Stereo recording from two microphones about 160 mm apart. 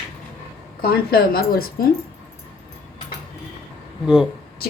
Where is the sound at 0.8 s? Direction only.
70° left (ahead or behind).